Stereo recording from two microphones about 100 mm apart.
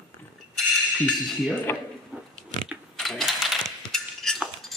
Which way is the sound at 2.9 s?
Centre (ahead or behind).